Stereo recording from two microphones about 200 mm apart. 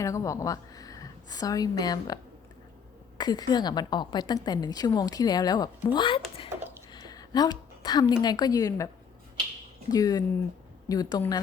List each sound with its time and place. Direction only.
0.0 s a woman's voice: 15° left (ahead or behind)
3.2 s a woman's voice: 20° left (ahead or behind)
6.9 s a sound: 20° left (ahead or behind)
8.2 s a woman's voice: 20° left (ahead or behind)
9.9 s a woman's voice: 15° left (ahead or behind)